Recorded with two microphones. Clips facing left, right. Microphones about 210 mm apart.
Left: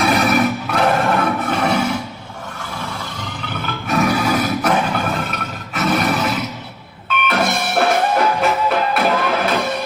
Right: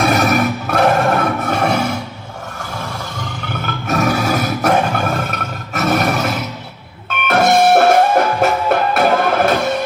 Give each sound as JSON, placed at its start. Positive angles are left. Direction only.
{"t": 0.0, "sound": "music", "side_deg": -45}
{"t": 3.8, "sound": "music", "side_deg": -45}
{"t": 5.7, "sound": "roar", "side_deg": -45}
{"t": 7.3, "sound": "music", "side_deg": -45}